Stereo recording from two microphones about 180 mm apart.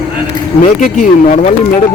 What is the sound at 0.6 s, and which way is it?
Speech, 45° left (ahead or behind).